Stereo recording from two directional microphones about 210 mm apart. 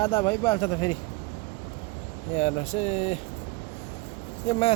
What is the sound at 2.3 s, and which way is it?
Speech, 30° left (ahead or behind).